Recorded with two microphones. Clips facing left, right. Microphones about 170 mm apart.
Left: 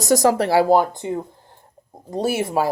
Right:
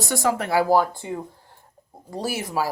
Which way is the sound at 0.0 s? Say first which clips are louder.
Left 7 dB; 40° left (ahead or behind).